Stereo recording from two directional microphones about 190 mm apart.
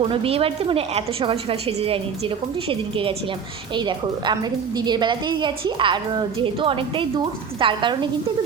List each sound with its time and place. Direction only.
0.0 s a woman's voice: 30° right (ahead or behind)